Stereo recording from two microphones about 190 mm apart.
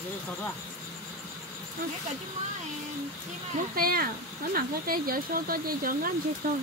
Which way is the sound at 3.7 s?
50° right (ahead or behind).